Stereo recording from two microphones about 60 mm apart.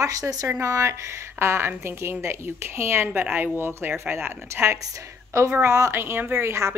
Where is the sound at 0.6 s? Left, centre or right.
Right.